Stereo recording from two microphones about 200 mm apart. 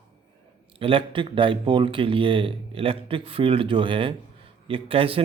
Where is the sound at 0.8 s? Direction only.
25° right (ahead or behind).